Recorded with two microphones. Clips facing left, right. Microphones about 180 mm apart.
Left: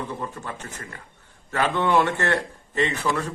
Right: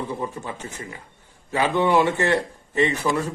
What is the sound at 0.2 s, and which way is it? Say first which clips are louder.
A man's voice: right 3 dB; 10° right (ahead or behind).